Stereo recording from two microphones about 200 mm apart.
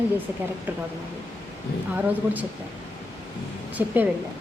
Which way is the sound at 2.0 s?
10° right (ahead or behind).